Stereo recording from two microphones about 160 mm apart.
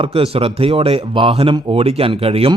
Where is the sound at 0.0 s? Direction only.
35° right (ahead or behind).